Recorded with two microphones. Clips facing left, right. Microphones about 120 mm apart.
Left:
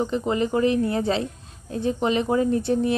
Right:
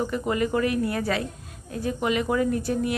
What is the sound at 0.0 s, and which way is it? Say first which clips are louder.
A woman's voice: left 2 dB; 25° left (ahead or behind).